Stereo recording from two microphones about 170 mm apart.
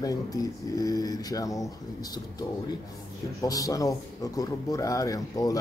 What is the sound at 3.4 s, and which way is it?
Speech, 20° left (ahead or behind).